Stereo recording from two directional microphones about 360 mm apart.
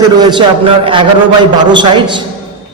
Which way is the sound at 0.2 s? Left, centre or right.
Centre.